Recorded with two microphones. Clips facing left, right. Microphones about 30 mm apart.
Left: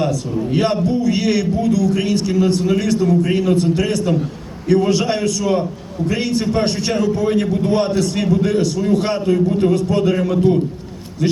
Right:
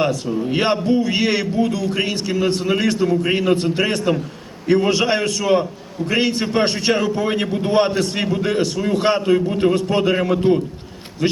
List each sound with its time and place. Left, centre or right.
0.0 s a man's voice: right